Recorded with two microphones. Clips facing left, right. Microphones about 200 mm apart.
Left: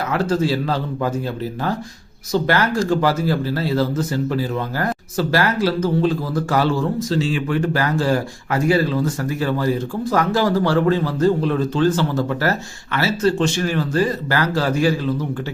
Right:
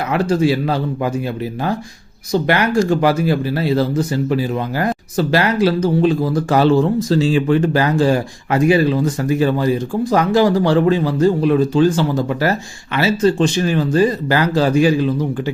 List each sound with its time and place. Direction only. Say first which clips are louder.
0.1 s speech: right 4 dB; 15° right (ahead or behind)
2.3 s speech: right 3 dB; 15° right (ahead or behind)
7.1 s speech: right 7 dB; 35° right (ahead or behind); by 15.1 s 15° right (ahead or behind)